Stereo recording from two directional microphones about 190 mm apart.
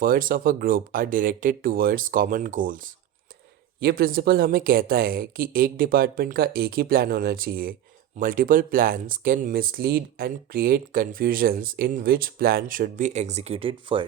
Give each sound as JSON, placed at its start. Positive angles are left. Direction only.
{"t": 0.0, "sound": "speech", "side_deg": -50}